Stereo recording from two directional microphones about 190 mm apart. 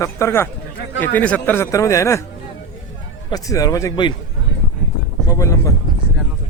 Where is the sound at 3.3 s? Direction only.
20° left (ahead or behind).